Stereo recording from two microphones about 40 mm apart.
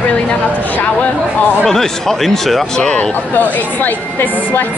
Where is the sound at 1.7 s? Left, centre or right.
Centre.